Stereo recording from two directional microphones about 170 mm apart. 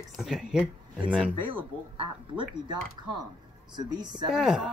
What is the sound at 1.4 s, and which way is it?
A woman's voice, 30° right (ahead or behind).